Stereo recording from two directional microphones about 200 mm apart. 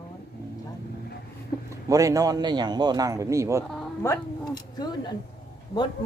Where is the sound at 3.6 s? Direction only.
5° left (ahead or behind).